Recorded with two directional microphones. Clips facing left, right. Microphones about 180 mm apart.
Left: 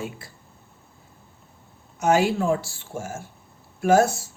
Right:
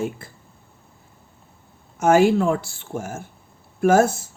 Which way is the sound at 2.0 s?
50° right (ahead or behind).